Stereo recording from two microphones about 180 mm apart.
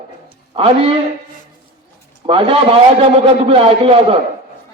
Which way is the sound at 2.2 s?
30° right (ahead or behind).